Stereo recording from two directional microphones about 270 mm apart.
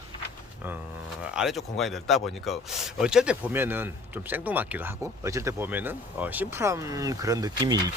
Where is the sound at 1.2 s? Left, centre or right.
Centre.